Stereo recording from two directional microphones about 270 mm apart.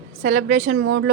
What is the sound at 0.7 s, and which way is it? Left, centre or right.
Speech, right.